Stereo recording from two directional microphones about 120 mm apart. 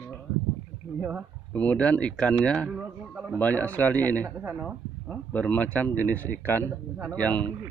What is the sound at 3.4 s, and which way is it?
Speech, 15° left (ahead or behind).